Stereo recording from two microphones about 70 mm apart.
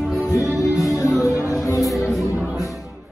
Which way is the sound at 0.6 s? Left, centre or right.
Left.